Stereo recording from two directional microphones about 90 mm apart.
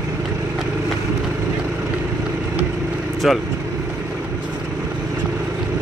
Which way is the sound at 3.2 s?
5° right (ahead or behind).